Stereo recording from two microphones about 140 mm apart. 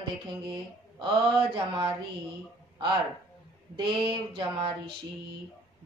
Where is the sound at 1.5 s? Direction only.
35° right (ahead or behind).